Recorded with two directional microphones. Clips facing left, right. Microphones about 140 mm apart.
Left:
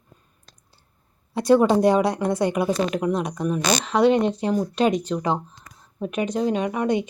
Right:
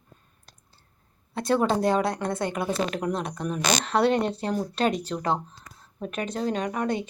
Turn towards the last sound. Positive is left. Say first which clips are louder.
# left 5 dB
turn(degrees=15)  # may be behind; listen again after turning